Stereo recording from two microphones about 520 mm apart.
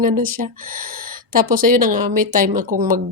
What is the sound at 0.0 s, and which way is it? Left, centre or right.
Speech, right.